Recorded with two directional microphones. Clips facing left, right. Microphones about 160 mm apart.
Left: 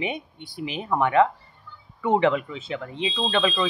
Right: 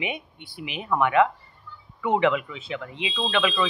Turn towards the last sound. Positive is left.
turn(degrees=35)  # may be behind; listen again after turning